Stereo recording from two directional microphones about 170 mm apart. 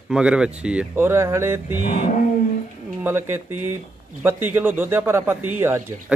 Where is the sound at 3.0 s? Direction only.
15° right (ahead or behind).